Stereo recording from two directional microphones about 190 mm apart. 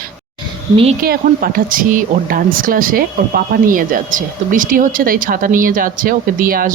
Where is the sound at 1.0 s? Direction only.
50° right (ahead or behind).